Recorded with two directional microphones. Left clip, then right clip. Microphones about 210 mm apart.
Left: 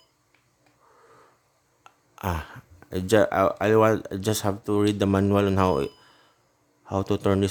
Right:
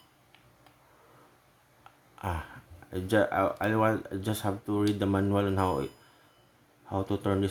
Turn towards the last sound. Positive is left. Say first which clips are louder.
# left 6 dB
turn(degrees=50)  # may be behind; listen again after turning